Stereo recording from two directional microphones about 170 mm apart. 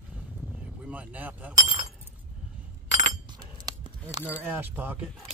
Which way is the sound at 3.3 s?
25° right (ahead or behind).